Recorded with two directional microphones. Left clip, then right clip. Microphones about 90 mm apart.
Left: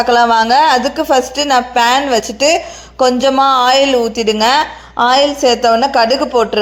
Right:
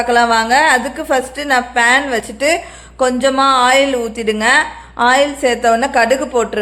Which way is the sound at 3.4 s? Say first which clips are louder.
Even; 40° left (ahead or behind).